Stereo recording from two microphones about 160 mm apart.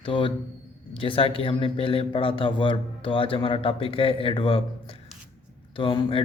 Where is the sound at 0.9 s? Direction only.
35° left (ahead or behind).